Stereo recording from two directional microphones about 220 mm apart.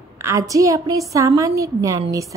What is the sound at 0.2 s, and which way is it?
A woman's voice, 15° right (ahead or behind).